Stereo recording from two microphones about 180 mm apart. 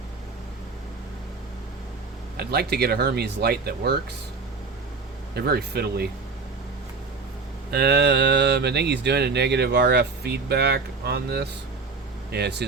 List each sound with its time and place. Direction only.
2.4 s speech: 60° right (ahead or behind)
5.3 s speech: 60° right (ahead or behind)
7.7 s speech: 65° right (ahead or behind)